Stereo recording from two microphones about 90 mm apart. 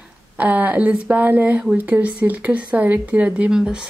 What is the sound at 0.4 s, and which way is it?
A woman's voice, 15° right (ahead or behind).